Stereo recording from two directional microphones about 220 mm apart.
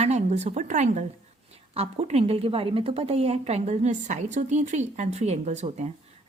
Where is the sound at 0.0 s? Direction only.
30° right (ahead or behind).